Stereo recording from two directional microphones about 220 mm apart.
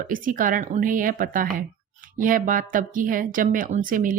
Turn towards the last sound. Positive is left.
turn(degrees=-40)  # may be behind; listen again after turning